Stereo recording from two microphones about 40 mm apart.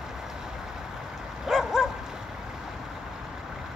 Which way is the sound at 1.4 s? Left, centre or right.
Centre.